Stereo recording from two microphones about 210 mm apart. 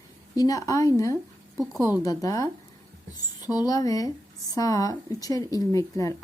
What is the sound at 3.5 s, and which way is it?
Speech, 15° left (ahead or behind).